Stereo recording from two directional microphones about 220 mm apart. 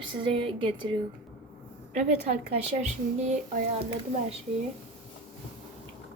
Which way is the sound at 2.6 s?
30° right (ahead or behind).